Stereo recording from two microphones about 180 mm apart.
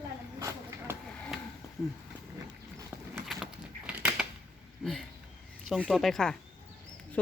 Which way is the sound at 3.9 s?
10° right (ahead or behind).